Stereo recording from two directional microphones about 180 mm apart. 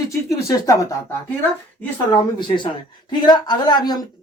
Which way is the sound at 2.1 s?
25° left (ahead or behind).